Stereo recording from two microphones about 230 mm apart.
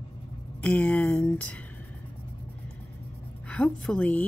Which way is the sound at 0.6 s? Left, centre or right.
Centre.